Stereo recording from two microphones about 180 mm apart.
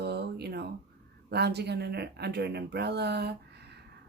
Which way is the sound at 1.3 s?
65° right (ahead or behind).